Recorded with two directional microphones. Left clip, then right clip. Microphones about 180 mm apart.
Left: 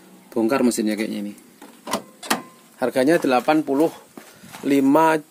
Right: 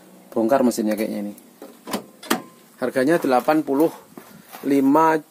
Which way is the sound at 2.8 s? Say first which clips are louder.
Left 1 dB; 20° left (ahead or behind).